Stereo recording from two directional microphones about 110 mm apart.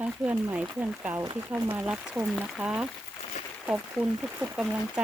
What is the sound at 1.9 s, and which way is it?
Speech, 5° right (ahead or behind).